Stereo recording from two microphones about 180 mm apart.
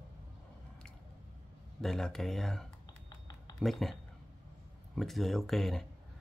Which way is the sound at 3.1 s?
25° left (ahead or behind).